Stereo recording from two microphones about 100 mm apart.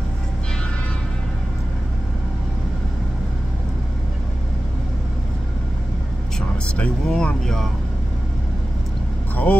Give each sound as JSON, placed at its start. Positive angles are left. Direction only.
{"t": 6.8, "sound": "speech", "side_deg": 10}
{"t": 9.3, "sound": "vehicle", "side_deg": 15}